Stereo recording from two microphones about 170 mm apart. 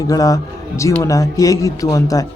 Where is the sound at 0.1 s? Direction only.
20° left (ahead or behind).